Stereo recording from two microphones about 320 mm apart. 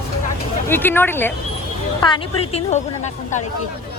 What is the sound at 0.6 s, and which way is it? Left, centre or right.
A woman's voice, centre.